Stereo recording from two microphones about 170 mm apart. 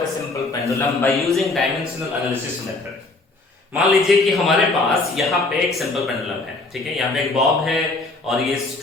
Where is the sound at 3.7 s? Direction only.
Centre (ahead or behind).